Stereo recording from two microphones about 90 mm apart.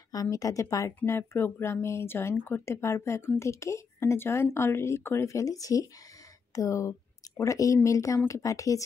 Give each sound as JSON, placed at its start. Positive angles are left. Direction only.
{"t": 0.1, "sound": "speech", "side_deg": 40}